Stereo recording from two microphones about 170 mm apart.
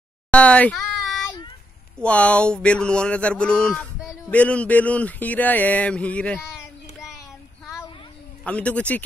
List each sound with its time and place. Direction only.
0.3 s a sound: 5° left (ahead or behind)
2.0 s speech: 5° left (ahead or behind)
7.6 s child singing: 20° left (ahead or behind)
8.5 s speech: 5° left (ahead or behind)